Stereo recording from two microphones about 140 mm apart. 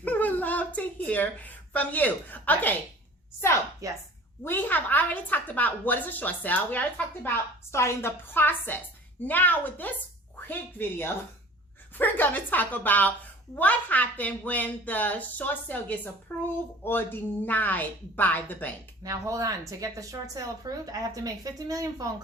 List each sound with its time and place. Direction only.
0.0 s a sound: 10° left (ahead or behind)
3.8 s speech: 25° right (ahead or behind)
4.4 s a woman's voice: 15° left (ahead or behind)
19.0 s speech: 25° right (ahead or behind)